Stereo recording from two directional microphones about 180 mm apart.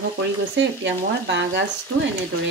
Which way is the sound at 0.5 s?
80° right.